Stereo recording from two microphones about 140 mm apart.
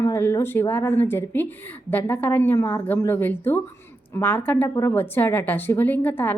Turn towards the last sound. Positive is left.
turn(degrees=15)  # may be behind; listen again after turning